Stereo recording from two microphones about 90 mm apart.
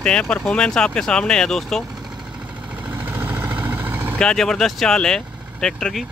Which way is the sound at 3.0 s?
25° right (ahead or behind).